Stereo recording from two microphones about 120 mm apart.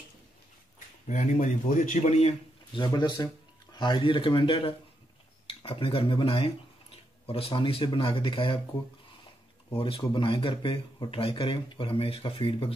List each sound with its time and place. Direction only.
1.0 s speech: 90° left; by 2.3 s 65° left (ahead or behind)
2.7 s speech: 40° left (ahead or behind)
9.8 s speech: 45° left (ahead or behind)